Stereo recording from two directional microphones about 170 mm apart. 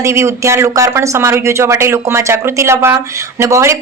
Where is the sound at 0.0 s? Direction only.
15° right (ahead or behind).